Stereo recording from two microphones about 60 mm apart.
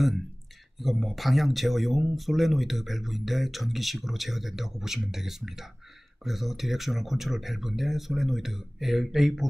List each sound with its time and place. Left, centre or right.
0.7 s speech: centre